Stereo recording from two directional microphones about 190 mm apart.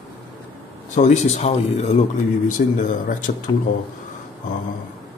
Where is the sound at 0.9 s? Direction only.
35° left (ahead or behind).